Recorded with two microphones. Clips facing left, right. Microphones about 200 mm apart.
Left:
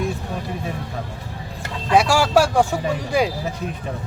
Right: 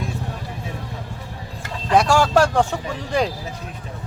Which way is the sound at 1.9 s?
5° left (ahead or behind).